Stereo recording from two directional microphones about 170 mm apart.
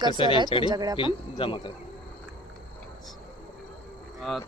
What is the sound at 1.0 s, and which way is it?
Speech, 30° left (ahead or behind).